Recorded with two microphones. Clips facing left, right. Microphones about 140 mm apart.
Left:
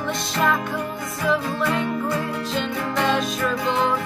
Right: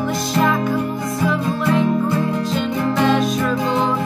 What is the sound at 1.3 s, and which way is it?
Music, centre (ahead or behind).